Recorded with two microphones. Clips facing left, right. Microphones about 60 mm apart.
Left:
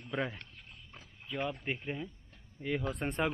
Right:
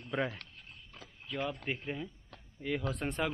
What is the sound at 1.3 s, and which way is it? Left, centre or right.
Speech, centre.